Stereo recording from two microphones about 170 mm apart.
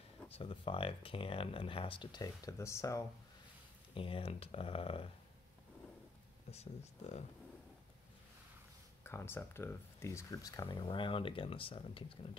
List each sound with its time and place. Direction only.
0.3 s speech: 35° left (ahead or behind); by 3.0 s 15° left (ahead or behind)
3.9 s speech: 30° left (ahead or behind)
6.5 s speech: 40° left (ahead or behind)
9.0 s speech: 15° left (ahead or behind); by 12.0 s 30° left (ahead or behind)